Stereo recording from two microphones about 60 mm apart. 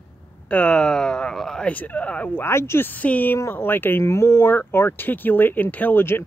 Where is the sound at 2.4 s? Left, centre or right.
Left.